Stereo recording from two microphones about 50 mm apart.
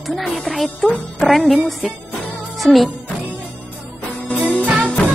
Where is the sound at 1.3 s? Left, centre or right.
Centre.